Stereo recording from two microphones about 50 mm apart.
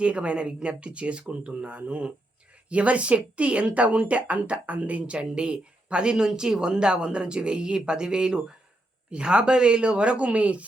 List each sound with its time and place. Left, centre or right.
0.0 s a woman's voice: right